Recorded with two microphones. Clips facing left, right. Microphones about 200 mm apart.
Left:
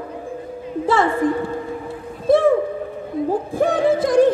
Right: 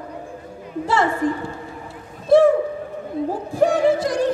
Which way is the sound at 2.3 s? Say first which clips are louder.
Right 1 dB; 55° left (ahead or behind).